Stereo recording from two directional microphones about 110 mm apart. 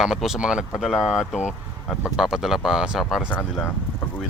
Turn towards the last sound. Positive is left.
turn(degrees=15)  # may be behind; listen again after turning